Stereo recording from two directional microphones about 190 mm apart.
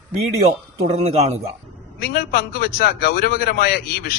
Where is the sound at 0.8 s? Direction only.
35° right (ahead or behind).